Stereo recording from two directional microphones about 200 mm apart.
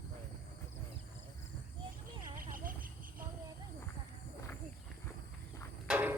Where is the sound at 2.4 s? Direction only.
45° right (ahead or behind).